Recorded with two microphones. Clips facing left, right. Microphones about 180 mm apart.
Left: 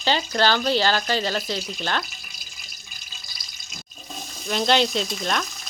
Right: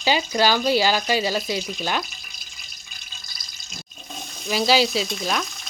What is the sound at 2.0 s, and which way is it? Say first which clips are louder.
Water tap: even; centre (ahead or behind).